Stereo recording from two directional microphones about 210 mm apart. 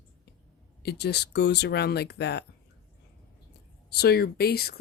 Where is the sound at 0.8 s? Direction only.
50° left (ahead or behind).